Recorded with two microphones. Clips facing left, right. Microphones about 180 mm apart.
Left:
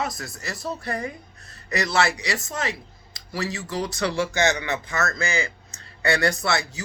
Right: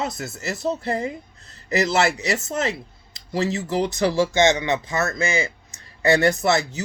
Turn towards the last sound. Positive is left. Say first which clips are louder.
# right 5 dB
turn(degrees=-20)  # may be behind; listen again after turning